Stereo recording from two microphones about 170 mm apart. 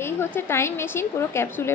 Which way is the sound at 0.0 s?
15° left (ahead or behind).